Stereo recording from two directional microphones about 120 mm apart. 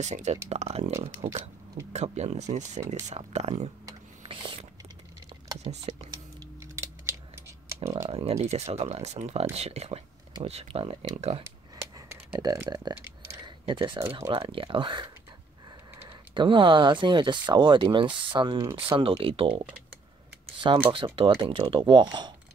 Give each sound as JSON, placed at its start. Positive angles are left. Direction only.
{"t": 0.0, "sound": "speech", "side_deg": -70}
{"t": 1.9, "sound": "speech", "side_deg": -70}
{"t": 4.3, "sound": "a sound", "side_deg": -45}
{"t": 5.6, "sound": "speech", "side_deg": -65}
{"t": 6.6, "sound": "scissors", "side_deg": -25}
{"t": 8.1, "sound": "speech", "side_deg": -55}
{"t": 11.4, "sound": "a sound", "side_deg": -20}
{"t": 12.3, "sound": "speech", "side_deg": -35}
{"t": 13.0, "sound": "a sound", "side_deg": -20}
{"t": 13.7, "sound": "speech", "side_deg": -45}
{"t": 16.1, "sound": "speech", "side_deg": -45}
{"t": 20.9, "sound": "speech", "side_deg": -45}